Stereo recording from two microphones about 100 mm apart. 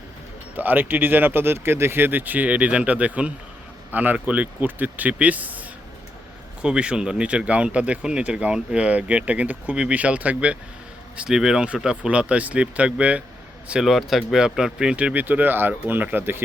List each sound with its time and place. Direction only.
0.5 s speech: 20° right (ahead or behind)